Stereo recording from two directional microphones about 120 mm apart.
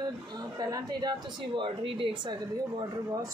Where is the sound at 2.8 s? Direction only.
30° right (ahead or behind).